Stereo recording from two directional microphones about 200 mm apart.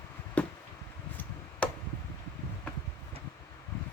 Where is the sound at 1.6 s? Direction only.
5° left (ahead or behind).